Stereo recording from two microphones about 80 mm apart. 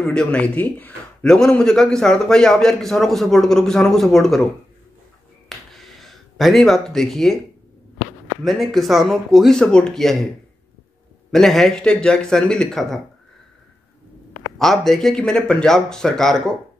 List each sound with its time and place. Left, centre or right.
0.0 s speech: centre
1.2 s a man's voice: centre
5.5 s a sound: centre
8.5 s a man's voice: centre
9.6 s speech: centre
11.3 s speech: centre
14.6 s a man's voice: centre